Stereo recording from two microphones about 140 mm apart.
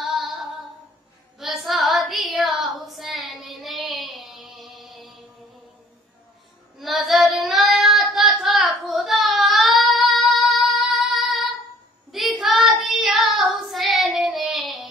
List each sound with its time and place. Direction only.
0.0 s female singing: centre (ahead or behind)
1.4 s child singing: centre (ahead or behind)
6.8 s child singing: centre (ahead or behind)